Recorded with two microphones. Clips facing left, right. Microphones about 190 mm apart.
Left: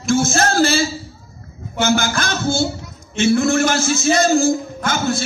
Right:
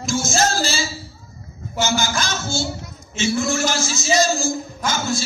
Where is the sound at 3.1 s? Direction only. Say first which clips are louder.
Left 6 dB; 55° left (ahead or behind).